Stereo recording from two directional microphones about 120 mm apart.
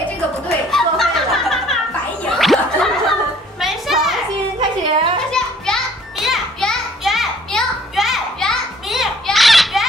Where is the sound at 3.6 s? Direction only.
Centre (ahead or behind).